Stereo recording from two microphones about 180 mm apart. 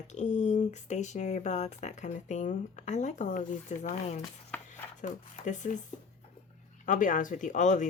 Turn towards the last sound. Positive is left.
turn(degrees=40)  # may be behind; listen again after turning